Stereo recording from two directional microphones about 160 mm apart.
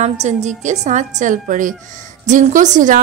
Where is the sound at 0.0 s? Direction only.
45° right (ahead or behind).